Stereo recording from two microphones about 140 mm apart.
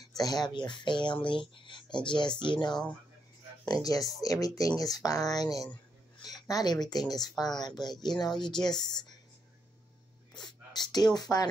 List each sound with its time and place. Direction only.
0.2 s speech: 30° left (ahead or behind)
3.8 s speech: 25° left (ahead or behind)
10.3 s speech: 30° left (ahead or behind)